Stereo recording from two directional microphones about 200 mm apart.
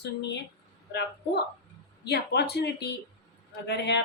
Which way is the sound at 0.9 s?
55° left (ahead or behind).